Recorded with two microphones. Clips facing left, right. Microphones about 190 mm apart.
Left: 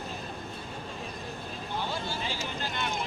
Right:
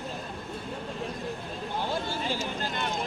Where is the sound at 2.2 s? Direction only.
45° right (ahead or behind).